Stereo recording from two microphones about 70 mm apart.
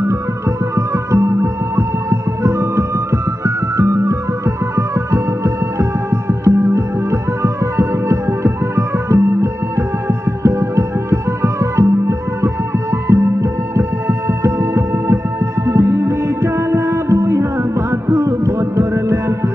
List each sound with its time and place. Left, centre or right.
0.7 s music: right